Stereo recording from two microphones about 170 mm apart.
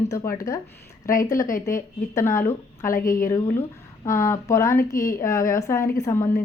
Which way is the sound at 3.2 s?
15° left (ahead or behind).